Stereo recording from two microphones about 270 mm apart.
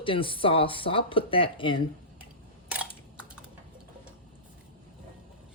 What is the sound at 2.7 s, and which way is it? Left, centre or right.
Camera, centre.